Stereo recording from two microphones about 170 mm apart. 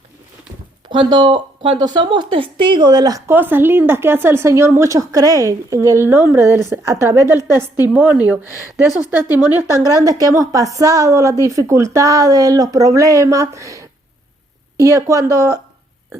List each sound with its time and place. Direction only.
0.9 s speech: 30° right (ahead or behind)